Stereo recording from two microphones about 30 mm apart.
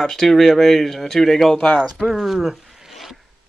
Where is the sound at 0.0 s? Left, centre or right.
Centre.